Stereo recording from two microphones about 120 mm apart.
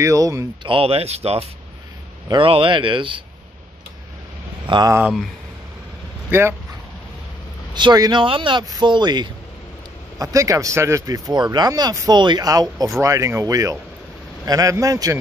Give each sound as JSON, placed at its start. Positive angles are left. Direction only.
{"t": 0.0, "sound": "speech", "side_deg": -25}
{"t": 0.7, "sound": "speech", "side_deg": -50}
{"t": 2.2, "sound": "speech", "side_deg": -45}
{"t": 4.6, "sound": "speech", "side_deg": -40}
{"t": 6.3, "sound": "speech", "side_deg": -15}
{"t": 7.7, "sound": "speech", "side_deg": -35}